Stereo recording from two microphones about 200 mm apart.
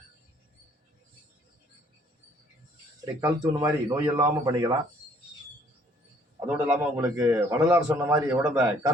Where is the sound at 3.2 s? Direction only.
20° right (ahead or behind).